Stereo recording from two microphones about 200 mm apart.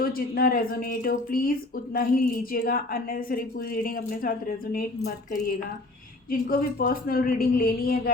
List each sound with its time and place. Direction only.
0.0 s speech: 45° left (ahead or behind)
6.5 s speech: 45° left (ahead or behind)